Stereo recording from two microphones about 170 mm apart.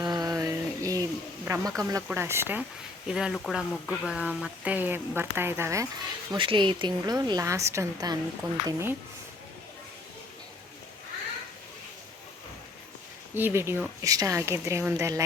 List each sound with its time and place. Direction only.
0.0 s a sound: 20° right (ahead or behind)
1.5 s speech: 15° right (ahead or behind)
6.3 s a woman's voice: 30° right (ahead or behind); by 9.0 s 15° right (ahead or behind)
13.3 s speech: 15° right (ahead or behind)